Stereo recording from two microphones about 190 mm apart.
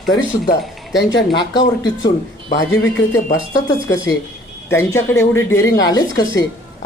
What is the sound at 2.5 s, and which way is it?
A woman's voice, 15° left (ahead or behind).